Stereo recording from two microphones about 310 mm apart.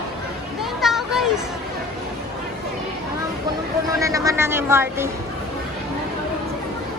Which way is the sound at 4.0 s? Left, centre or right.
Centre.